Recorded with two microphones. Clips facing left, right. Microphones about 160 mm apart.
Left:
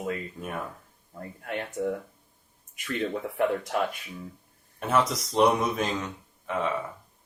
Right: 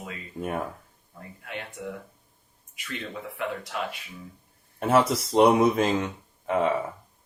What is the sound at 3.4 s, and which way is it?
Speech, 45° left (ahead or behind).